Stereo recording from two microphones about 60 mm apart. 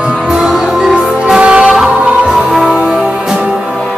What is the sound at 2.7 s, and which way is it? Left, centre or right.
Music, centre.